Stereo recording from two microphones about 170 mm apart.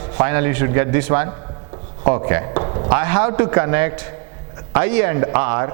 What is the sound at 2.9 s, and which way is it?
Speech, 15° right (ahead or behind).